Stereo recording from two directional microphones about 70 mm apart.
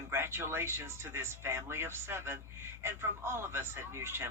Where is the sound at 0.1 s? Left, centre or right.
Right.